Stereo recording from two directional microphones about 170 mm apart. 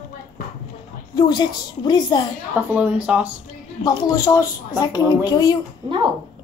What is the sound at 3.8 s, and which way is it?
A woman's voice, 25° left (ahead or behind).